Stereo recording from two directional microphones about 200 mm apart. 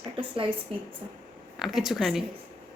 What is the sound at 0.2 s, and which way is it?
Speech, 25° right (ahead or behind).